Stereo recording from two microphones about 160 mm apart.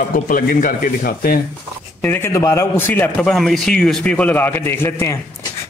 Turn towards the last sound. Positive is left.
turn(degrees=15)  # may be behind; listen again after turning